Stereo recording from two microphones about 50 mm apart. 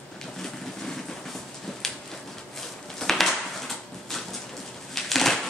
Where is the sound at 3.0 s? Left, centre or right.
Centre.